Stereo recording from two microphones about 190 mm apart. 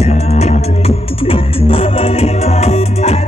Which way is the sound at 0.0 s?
35° left (ahead or behind).